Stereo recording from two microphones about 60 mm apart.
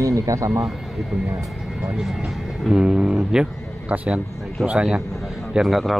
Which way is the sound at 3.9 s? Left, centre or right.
Right.